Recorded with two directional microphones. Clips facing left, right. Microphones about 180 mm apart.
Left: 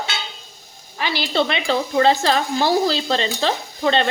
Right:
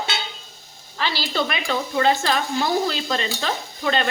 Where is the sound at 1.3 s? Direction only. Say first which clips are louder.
Left 6 dB; 30° left (ahead or behind).